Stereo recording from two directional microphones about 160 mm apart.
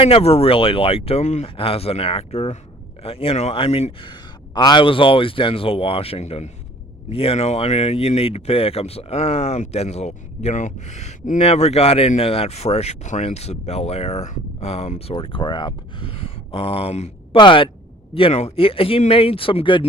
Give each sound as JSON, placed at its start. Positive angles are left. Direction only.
{"t": 0.0, "sound": "speech", "side_deg": 40}